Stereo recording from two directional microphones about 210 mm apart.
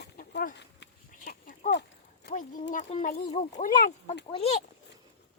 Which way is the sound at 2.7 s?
35° left (ahead or behind).